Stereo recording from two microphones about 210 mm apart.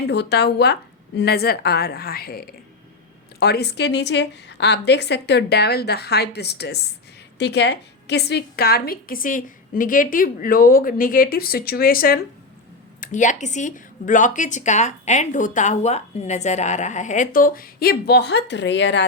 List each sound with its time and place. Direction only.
0.0 s a woman's voice: 55° left (ahead or behind)
3.4 s a woman's voice: 50° left (ahead or behind)